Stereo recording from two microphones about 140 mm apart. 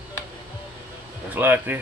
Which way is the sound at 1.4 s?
15° right (ahead or behind).